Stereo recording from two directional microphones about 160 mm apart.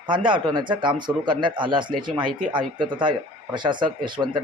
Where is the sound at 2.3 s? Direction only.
55° right (ahead or behind).